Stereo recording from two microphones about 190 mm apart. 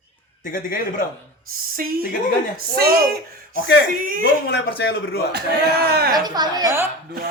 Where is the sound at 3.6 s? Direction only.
55° left (ahead or behind).